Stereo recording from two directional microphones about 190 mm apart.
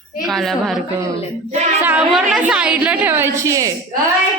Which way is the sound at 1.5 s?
35° right (ahead or behind).